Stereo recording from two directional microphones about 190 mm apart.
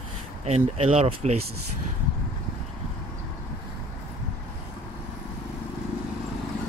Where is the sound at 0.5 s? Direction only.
35° right (ahead or behind).